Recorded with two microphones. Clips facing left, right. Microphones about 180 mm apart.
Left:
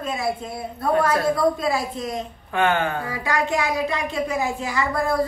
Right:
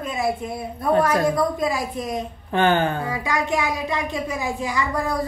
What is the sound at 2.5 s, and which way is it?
Speech, 35° right (ahead or behind).